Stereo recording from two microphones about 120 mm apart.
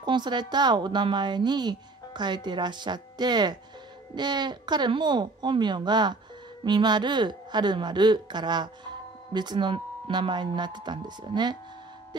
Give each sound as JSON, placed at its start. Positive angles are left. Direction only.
{"t": 0.0, "sound": "a woman's voice", "side_deg": -40}